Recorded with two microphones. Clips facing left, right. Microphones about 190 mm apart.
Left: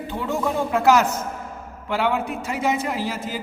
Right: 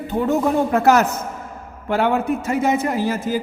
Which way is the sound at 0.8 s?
55° right (ahead or behind).